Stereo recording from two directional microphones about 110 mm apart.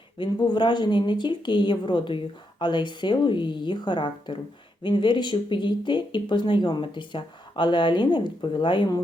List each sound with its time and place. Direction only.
0.2 s a woman's voice: 45° left (ahead or behind)